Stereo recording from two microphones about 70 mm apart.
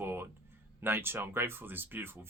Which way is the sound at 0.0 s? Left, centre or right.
Right.